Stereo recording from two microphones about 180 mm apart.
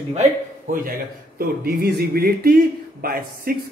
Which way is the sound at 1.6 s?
60° right (ahead or behind).